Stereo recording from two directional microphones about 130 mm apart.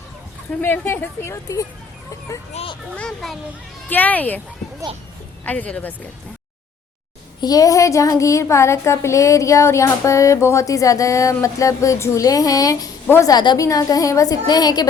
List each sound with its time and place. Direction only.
0.6 s a woman's voice: 15° left (ahead or behind)
2.5 s a child's voice: 50° left (ahead or behind)
2.9 s speech: 5° left (ahead or behind)
3.8 s speech: 15° left (ahead or behind)
5.5 s speech: 10° left (ahead or behind)
7.4 s a woman's voice: 30° left (ahead or behind)